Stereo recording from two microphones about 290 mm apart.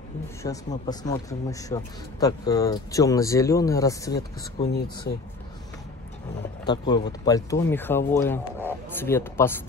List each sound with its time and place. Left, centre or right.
0.4 s a man's voice: centre
6.6 s a man's voice: centre